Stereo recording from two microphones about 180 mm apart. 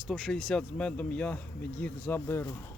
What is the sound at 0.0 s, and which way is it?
Speech, centre (ahead or behind).